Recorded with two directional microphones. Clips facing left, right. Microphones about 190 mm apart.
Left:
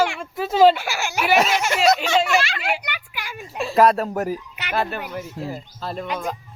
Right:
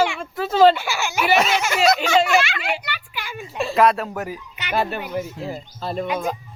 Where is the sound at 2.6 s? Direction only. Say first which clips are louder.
Even; 10° left (ahead or behind).